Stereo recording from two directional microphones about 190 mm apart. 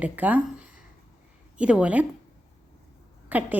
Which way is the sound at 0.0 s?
10° right (ahead or behind).